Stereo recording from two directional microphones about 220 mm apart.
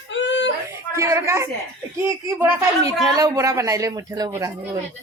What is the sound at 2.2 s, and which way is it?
Speech, 10° right (ahead or behind).